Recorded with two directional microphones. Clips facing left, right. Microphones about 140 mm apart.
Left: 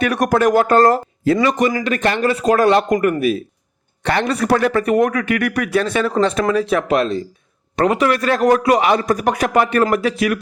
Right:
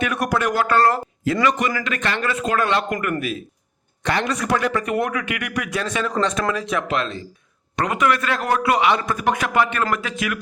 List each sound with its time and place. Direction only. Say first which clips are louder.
0.0 s a man's voice: left 6 dB; 40° left (ahead or behind)